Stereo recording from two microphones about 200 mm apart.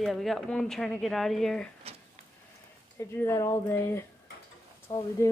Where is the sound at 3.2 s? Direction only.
15° left (ahead or behind).